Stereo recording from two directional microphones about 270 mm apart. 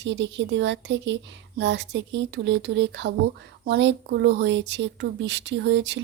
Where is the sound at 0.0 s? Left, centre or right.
Right.